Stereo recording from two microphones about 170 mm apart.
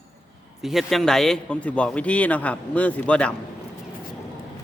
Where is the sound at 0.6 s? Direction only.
Centre (ahead or behind).